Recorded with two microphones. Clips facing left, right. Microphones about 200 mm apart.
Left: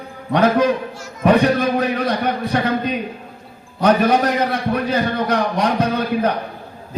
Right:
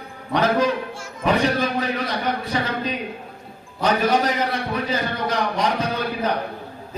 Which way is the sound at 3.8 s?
60° left (ahead or behind).